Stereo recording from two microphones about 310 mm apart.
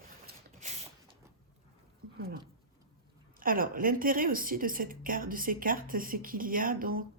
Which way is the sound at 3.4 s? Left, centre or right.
Right.